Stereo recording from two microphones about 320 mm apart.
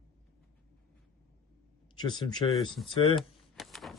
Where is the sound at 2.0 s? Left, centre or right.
Centre.